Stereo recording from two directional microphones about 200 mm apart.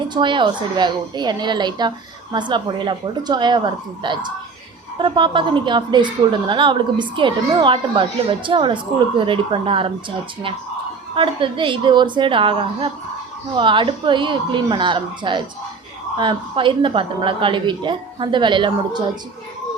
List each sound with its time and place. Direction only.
0.1 s a woman's voice: 25° right (ahead or behind)
11.1 s a woman's voice: 25° right (ahead or behind)